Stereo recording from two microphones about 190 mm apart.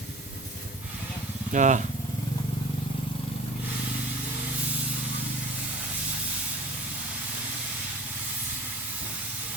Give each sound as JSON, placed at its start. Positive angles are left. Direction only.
{"t": 1.5, "sound": "speech", "side_deg": -40}